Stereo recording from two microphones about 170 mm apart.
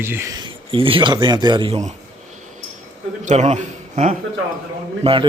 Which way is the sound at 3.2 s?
45° right (ahead or behind).